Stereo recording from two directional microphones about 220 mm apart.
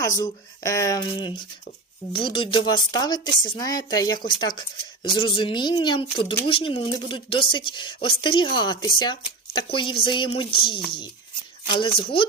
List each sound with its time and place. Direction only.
0.2 s speech: 15° left (ahead or behind)